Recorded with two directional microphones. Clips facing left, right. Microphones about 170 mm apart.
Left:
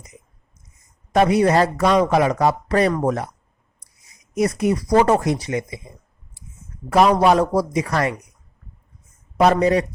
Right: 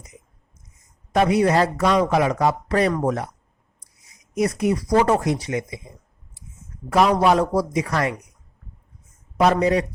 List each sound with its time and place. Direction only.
1.1 s a man's voice: 40° left (ahead or behind)
4.4 s a man's voice: 35° left (ahead or behind)
6.9 s a man's voice: 40° left (ahead or behind)
9.4 s a man's voice: 40° left (ahead or behind)